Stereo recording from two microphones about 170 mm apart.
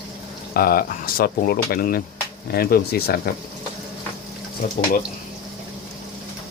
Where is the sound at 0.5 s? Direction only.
60° left (ahead or behind).